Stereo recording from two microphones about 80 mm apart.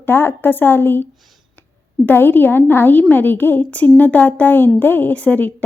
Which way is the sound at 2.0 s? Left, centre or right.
Left.